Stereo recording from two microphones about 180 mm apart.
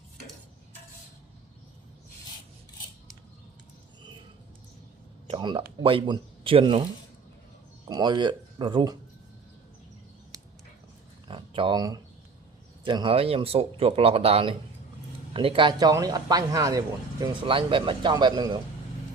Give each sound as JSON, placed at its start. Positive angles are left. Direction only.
{"t": 5.3, "sound": "a man's voice", "side_deg": -30}
{"t": 7.9, "sound": "a man's voice", "side_deg": -25}
{"t": 11.3, "sound": "a sound", "side_deg": -30}
{"t": 12.8, "sound": "a man's voice", "side_deg": -25}